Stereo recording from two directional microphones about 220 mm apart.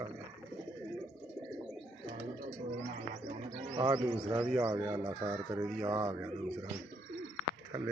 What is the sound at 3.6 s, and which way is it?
Speech, 20° right (ahead or behind).